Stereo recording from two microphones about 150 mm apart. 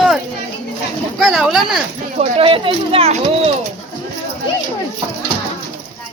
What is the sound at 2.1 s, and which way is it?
Speech, 45° right (ahead or behind).